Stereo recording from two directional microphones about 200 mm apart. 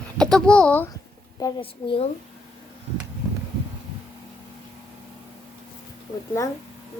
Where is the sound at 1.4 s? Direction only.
20° left (ahead or behind).